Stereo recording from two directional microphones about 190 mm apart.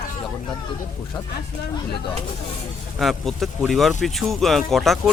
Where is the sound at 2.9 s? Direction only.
Centre (ahead or behind).